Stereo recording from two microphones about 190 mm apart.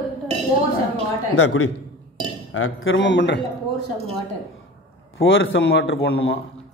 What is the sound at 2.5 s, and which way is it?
Speech, 90° left.